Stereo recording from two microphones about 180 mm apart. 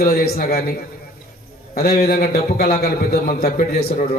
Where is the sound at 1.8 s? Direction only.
55° left (ahead or behind).